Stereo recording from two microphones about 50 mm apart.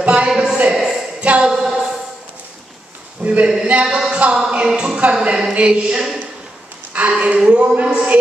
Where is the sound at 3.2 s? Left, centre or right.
Right.